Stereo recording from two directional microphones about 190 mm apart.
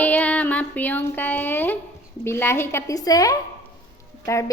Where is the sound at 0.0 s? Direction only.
10° left (ahead or behind).